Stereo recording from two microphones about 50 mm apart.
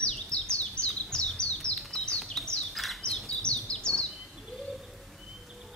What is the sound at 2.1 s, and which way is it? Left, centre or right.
Bird, centre.